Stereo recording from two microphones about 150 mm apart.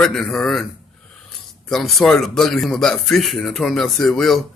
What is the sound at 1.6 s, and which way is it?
A man's voice, centre (ahead or behind).